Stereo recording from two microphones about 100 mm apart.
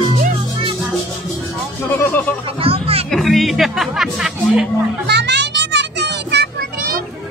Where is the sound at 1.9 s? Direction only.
20° left (ahead or behind).